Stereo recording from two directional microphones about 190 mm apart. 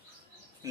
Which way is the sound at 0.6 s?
15° right (ahead or behind).